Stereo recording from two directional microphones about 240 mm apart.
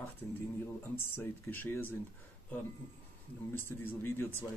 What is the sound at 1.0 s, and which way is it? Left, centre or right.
Speech, centre.